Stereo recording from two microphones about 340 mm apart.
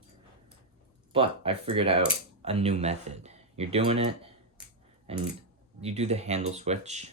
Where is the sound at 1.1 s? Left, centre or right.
Centre.